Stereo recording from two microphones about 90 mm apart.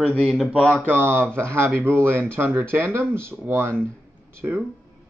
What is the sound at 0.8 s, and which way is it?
Speech, 25° right (ahead or behind).